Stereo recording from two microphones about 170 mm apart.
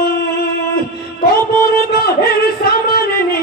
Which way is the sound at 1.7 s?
65° left (ahead or behind).